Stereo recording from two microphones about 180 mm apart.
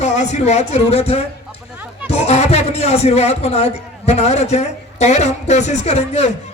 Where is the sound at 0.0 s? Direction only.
40° left (ahead or behind).